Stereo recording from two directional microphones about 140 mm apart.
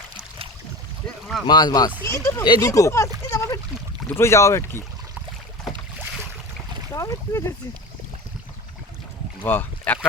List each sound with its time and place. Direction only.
1.5 s speech: 30° left (ahead or behind)
2.0 s speech: 20° left (ahead or behind)
3.2 s a sound: 25° left (ahead or behind)
4.1 s speech: 20° left (ahead or behind)
6.9 s speech: 20° left (ahead or behind)
9.4 s speech: 15° left (ahead or behind)